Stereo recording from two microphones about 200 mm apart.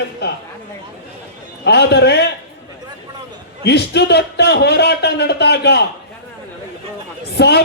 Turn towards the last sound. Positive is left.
turn(degrees=55)  # may be behind; listen again after turning